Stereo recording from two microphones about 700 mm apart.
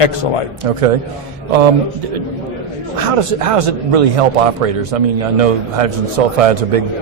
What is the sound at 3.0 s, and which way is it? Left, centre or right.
A man's voice, right.